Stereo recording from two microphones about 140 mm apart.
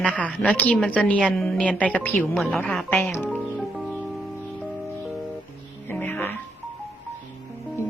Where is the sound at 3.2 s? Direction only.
15° left (ahead or behind).